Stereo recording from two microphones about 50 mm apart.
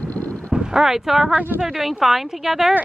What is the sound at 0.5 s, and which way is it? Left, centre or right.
Speech, centre.